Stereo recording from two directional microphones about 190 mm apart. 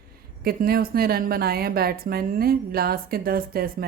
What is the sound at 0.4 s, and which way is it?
A woman's voice, 50° right (ahead or behind).